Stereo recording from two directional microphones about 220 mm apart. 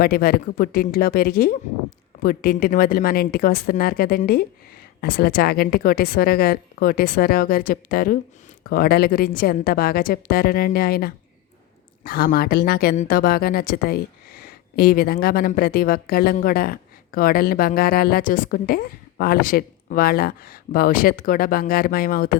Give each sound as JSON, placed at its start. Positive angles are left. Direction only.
{"t": 0.0, "sound": "a woman's voice", "side_deg": 45}